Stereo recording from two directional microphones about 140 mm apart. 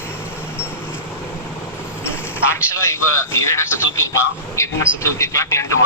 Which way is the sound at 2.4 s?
20° left (ahead or behind).